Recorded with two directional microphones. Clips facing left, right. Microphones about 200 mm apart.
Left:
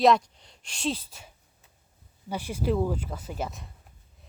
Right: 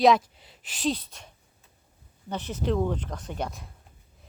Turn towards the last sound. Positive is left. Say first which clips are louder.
# right 1 dB
turn(degrees=0)  # may be behind; listen again after turning